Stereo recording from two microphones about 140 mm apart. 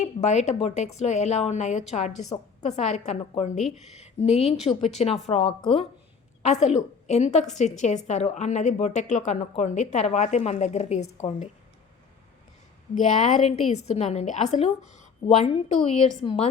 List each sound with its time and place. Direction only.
0.0 s a woman's voice: 55° left (ahead or behind)
4.7 s speech: 25° left (ahead or behind)
5.3 s a woman's voice: 45° left (ahead or behind)
12.9 s a woman's voice: 60° left (ahead or behind); by 16.5 s 40° left (ahead or behind)